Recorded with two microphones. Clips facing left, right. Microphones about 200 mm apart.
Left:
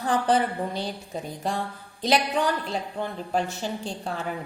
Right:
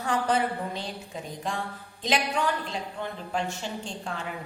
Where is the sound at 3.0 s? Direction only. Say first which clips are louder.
Left 4 dB; 40° left (ahead or behind).